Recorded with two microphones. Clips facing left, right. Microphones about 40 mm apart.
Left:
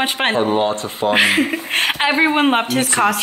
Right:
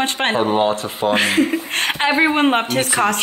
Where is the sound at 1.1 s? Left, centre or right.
Centre.